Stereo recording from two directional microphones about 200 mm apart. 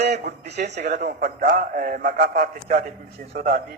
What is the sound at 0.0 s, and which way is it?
Speech, 55° right (ahead or behind).